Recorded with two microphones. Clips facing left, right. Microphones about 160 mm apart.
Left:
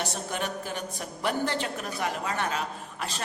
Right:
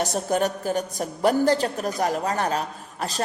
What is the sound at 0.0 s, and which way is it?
A woman's voice, 40° right (ahead or behind).